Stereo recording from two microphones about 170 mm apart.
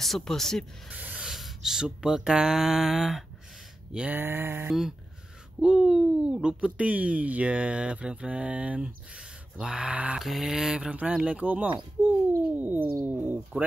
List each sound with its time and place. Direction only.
0.0 s speech: centre (ahead or behind)
0.9 s a sound: 10° right (ahead or behind)
3.9 s speech: 10° right (ahead or behind)